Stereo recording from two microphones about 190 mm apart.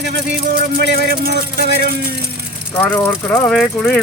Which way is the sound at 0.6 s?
55° right (ahead or behind).